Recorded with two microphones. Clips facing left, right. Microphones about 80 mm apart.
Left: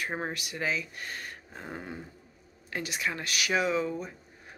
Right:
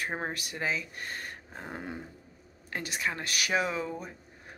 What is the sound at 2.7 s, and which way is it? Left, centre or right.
Speech, right.